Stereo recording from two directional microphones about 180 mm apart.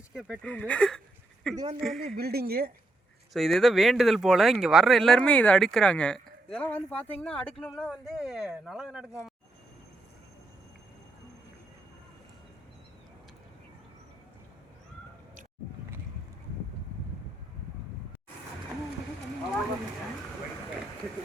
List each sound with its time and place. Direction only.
0.1 s speech: 5° right (ahead or behind)
2.1 s speech: 60° right (ahead or behind)
3.3 s speech: centre (ahead or behind)